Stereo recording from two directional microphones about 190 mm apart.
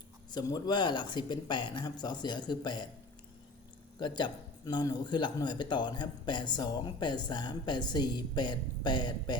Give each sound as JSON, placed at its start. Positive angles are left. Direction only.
{"t": 0.3, "sound": "a man's voice", "side_deg": 20}
{"t": 4.0, "sound": "a man's voice", "side_deg": 25}